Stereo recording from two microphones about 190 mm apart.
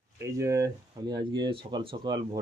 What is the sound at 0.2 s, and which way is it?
Speech, 15° right (ahead or behind).